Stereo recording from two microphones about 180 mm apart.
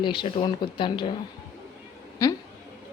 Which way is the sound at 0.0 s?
25° left (ahead or behind).